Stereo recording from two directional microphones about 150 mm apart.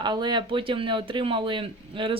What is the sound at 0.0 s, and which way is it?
Speech, 30° right (ahead or behind).